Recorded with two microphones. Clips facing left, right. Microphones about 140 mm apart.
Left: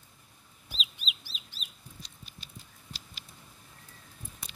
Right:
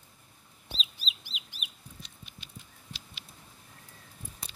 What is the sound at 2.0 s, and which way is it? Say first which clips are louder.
Patter: left 1 dB; 35° left (ahead or behind).